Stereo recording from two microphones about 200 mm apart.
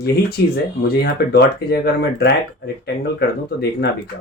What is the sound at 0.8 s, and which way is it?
Speech, 55° left (ahead or behind).